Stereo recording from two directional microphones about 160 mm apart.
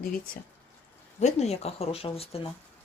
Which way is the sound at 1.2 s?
40° left (ahead or behind).